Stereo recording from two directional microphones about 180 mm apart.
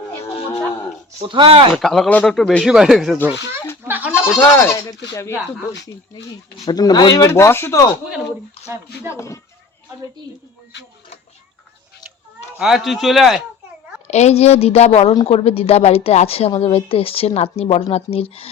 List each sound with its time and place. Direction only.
0.3 s a sound: 30° left (ahead or behind)
1.3 s speech: 30° right (ahead or behind)
1.7 s speech: centre (ahead or behind)
3.8 s goat: 10° right (ahead or behind)
4.4 s speech: 15° left (ahead or behind)
5.7 s speech: 75° left (ahead or behind)
6.7 s speech: 20° left (ahead or behind)
9.1 s speech: 15° left (ahead or behind)
12.5 s speech: centre (ahead or behind)
14.1 s a woman's voice: 40° left (ahead or behind)